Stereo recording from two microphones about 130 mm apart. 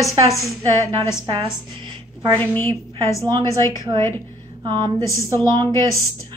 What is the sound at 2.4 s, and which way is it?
Speech, 10° left (ahead or behind).